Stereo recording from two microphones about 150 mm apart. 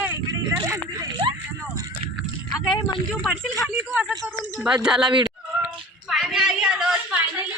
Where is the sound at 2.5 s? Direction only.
25° left (ahead or behind).